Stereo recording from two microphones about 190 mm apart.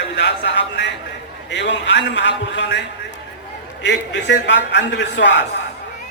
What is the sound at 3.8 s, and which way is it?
A man's voice, 70° left (ahead or behind).